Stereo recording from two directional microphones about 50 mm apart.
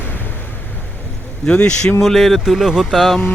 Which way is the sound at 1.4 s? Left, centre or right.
Centre.